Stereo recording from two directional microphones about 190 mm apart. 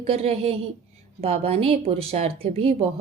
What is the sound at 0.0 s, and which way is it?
A woman's voice, 30° right (ahead or behind).